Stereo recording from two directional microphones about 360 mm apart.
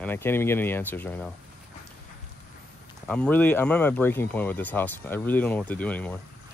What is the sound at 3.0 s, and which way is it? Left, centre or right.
Speech, centre.